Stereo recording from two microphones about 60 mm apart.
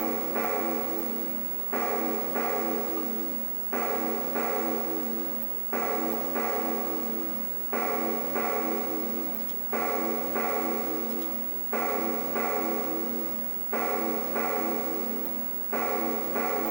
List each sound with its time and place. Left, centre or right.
0.0 s music: centre
1.9 s music: centre